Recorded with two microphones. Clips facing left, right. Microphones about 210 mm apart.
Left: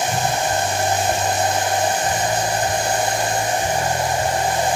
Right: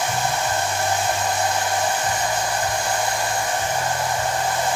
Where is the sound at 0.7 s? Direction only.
20° left (ahead or behind).